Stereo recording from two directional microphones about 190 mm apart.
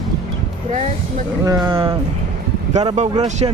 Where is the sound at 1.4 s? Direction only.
20° right (ahead or behind).